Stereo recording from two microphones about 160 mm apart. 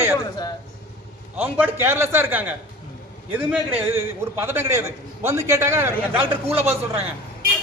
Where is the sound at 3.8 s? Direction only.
15° right (ahead or behind).